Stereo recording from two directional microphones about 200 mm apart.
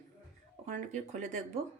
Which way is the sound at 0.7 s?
40° right (ahead or behind).